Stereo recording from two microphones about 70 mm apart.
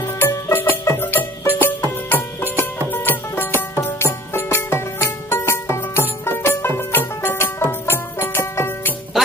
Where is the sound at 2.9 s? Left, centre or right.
Left.